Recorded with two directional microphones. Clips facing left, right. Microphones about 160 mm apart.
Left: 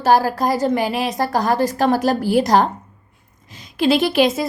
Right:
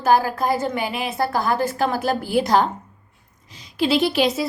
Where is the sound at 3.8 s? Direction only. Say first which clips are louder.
Left 3 dB; 50° left (ahead or behind).